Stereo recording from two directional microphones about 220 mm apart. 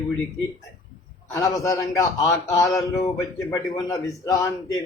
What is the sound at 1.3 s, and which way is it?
Speech, 15° left (ahead or behind).